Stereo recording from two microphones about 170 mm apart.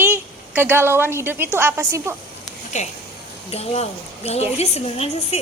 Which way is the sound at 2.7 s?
45° left (ahead or behind).